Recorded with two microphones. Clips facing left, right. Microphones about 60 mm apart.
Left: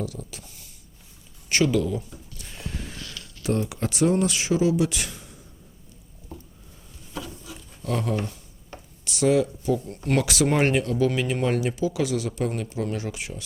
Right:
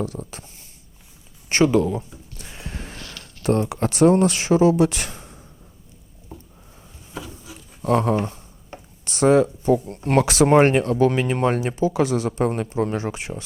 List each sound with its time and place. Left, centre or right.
0.0 s speech: right
1.7 s speech: right
6.3 s a sound: centre
7.1 s wood: centre
7.8 s a sound: right
9.9 s speech: right